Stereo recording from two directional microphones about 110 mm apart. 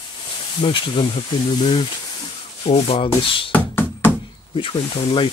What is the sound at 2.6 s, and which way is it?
Sanding, 60° left (ahead or behind).